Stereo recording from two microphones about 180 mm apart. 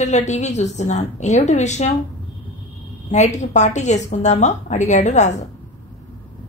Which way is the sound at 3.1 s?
40° left (ahead or behind).